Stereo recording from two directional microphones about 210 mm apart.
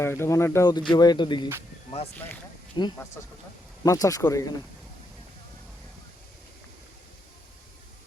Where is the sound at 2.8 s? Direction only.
20° left (ahead or behind).